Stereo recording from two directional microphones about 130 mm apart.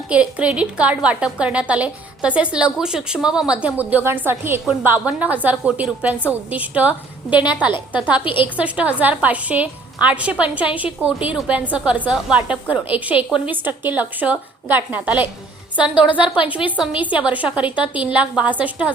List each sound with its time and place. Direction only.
0.1 s a woman's voice: 10° right (ahead or behind)
8.2 s a woman's voice: 40° left (ahead or behind)
8.5 s a woman's voice: 10° right (ahead or behind)